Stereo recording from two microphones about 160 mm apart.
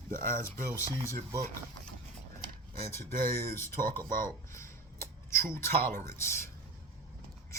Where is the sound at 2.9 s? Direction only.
15° left (ahead or behind).